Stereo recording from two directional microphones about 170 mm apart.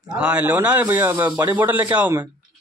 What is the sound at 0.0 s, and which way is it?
A man's voice, 5° right (ahead or behind).